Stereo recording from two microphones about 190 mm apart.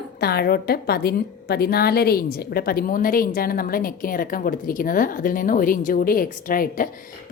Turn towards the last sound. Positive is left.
turn(degrees=45)  # may be behind; listen again after turning